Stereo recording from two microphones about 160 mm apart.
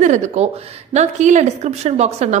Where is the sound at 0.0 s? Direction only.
45° right (ahead or behind).